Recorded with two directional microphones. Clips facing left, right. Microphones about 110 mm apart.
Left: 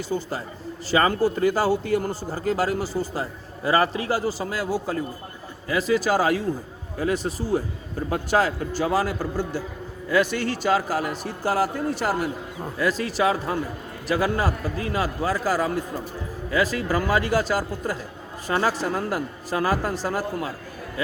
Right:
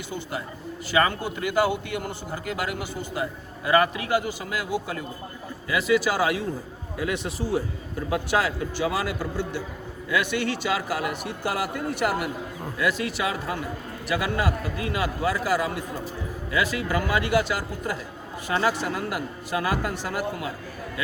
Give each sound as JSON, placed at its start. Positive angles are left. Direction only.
{"t": 0.1, "sound": "a man's voice", "side_deg": 35}